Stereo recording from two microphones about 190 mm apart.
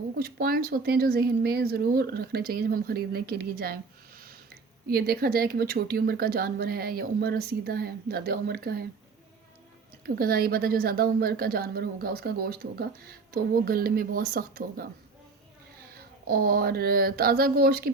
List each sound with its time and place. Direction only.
0.2 s a woman's voice: 50° right (ahead or behind)
4.9 s a woman's voice: 55° right (ahead or behind)
10.2 s a woman's voice: 50° right (ahead or behind)
16.0 s a woman's voice: 50° right (ahead or behind)